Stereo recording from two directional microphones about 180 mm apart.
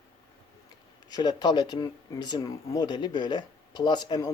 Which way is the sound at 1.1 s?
20° left (ahead or behind).